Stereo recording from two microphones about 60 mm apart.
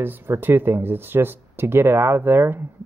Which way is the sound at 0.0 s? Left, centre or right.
Right.